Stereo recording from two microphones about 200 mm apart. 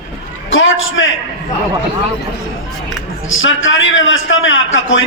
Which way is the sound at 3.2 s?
75° left (ahead or behind).